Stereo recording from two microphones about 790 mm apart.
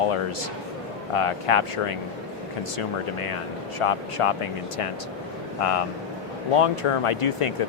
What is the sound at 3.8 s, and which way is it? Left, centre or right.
Speech, left.